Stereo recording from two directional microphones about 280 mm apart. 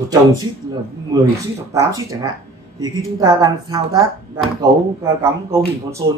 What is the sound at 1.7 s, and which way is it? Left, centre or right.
Speech, centre.